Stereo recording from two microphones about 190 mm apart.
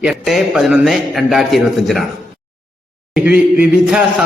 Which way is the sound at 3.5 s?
5° right (ahead or behind).